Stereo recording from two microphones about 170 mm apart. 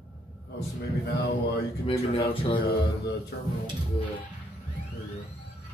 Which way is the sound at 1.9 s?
35° left (ahead or behind).